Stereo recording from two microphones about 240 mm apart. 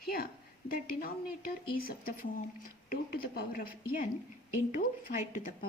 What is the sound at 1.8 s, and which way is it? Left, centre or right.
A woman's voice, left.